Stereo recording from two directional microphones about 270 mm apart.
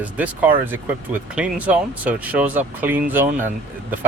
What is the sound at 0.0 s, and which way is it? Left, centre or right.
Speech, centre.